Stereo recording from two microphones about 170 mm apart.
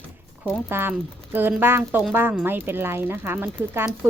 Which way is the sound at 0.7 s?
10° right (ahead or behind).